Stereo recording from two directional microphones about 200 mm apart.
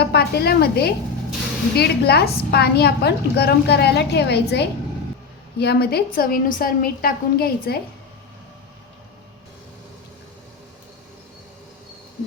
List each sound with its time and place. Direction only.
0.0 s a woman's voice: 55° left (ahead or behind)